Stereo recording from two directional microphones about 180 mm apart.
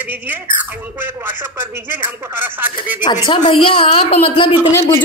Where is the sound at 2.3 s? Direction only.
10° right (ahead or behind).